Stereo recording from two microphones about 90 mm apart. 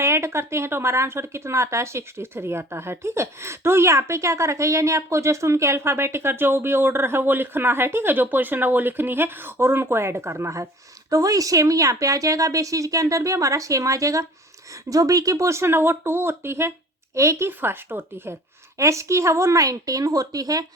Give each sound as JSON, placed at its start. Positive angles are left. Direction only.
{"t": 0.0, "sound": "speech", "side_deg": -30}